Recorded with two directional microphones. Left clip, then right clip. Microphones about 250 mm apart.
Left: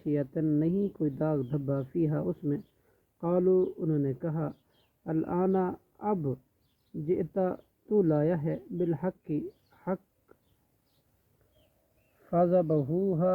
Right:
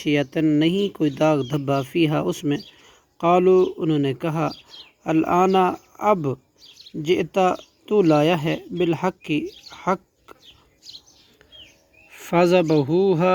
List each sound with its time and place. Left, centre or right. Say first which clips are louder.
0.0 s speech: right 10 dB; right
9.8 s bird: right 12 dB; right
12.2 s speech: right 8 dB; right